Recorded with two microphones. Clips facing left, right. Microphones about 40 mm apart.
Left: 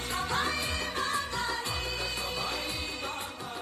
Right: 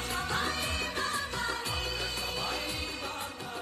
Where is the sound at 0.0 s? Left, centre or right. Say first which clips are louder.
Left 2 dB; left.